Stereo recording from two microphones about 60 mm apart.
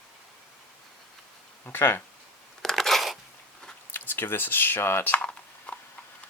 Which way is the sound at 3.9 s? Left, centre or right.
Left.